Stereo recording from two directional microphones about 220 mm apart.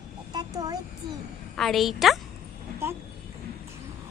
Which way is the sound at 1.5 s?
Centre (ahead or behind).